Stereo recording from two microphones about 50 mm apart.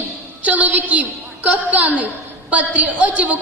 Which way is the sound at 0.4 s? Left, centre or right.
Right.